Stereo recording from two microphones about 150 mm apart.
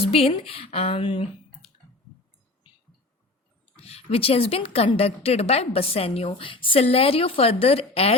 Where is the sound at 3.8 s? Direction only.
40° left (ahead or behind).